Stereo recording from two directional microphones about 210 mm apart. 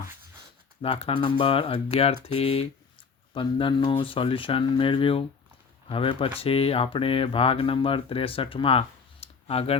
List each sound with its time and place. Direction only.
0.8 s speech: 25° left (ahead or behind)